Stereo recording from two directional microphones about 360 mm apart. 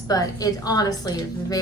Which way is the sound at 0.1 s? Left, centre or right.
Centre.